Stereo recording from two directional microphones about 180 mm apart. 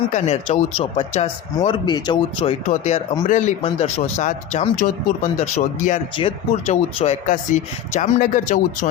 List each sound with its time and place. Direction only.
0.1 s speech: 40° left (ahead or behind)
1.5 s speech: 25° left (ahead or behind); by 8.9 s 45° left (ahead or behind)